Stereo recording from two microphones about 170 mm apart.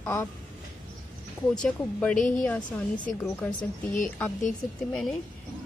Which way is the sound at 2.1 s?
50° left (ahead or behind).